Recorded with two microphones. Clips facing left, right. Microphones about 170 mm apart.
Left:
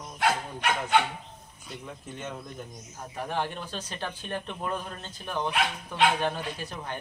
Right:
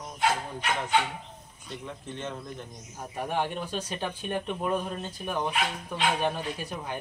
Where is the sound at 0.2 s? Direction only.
60° left (ahead or behind).